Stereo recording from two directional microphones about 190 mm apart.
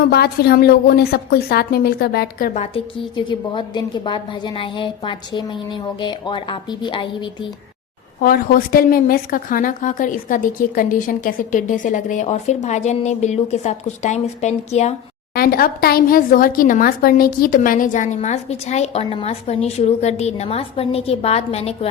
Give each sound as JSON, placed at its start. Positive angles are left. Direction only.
{"t": 0.1, "sound": "a woman's voice", "side_deg": 55}
{"t": 2.6, "sound": "a woman's voice", "side_deg": 25}
{"t": 8.2, "sound": "a woman's voice", "side_deg": 50}
{"t": 15.4, "sound": "a woman's voice", "side_deg": 50}